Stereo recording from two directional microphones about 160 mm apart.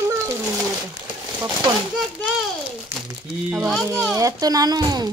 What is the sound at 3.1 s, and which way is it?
A child's voice, 10° right (ahead or behind).